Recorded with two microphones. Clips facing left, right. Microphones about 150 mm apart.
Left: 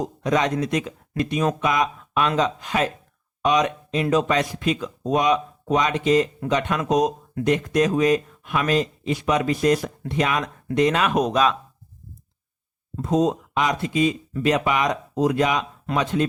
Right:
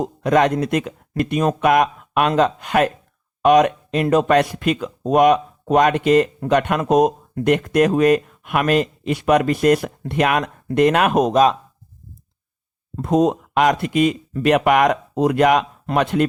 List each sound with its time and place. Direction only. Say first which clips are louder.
0.0 s speech: right 5 dB; 55° right (ahead or behind)
13.0 s speech: right 4 dB; 60° right (ahead or behind)